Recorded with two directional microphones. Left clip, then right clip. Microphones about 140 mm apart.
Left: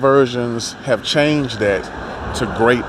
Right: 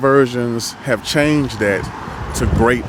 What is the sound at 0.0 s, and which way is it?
Speech, 60° right (ahead or behind).